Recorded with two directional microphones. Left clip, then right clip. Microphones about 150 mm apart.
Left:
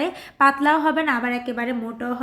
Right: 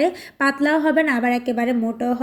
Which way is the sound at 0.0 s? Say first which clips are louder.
Left 1 dB; 10° right (ahead or behind).